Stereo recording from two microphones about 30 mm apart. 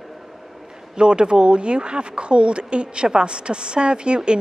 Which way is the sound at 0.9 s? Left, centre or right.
Right.